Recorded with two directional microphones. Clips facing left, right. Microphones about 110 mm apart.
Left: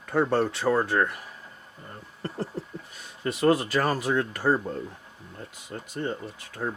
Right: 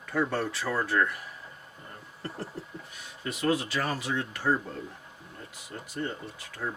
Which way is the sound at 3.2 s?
45° left (ahead or behind).